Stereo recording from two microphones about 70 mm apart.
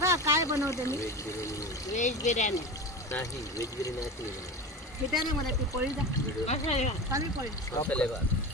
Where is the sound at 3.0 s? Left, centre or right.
Left.